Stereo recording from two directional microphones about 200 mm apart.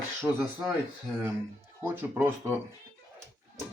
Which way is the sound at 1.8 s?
10° right (ahead or behind).